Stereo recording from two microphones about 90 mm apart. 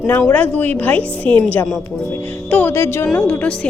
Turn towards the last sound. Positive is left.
turn(degrees=10)  # may be behind; listen again after turning